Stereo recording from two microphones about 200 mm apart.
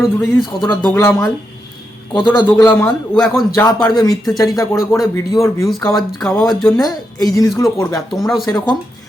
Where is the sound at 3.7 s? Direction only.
20° left (ahead or behind).